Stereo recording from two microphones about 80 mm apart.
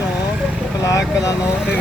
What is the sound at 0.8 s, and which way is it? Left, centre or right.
Speech, left.